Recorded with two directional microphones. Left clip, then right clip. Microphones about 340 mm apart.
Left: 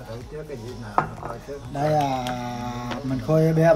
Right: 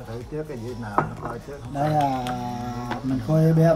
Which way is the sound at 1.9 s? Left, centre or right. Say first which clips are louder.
Left 1 dB; centre.